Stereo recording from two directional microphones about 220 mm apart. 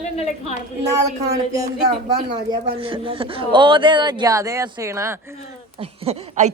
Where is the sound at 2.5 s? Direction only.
25° right (ahead or behind).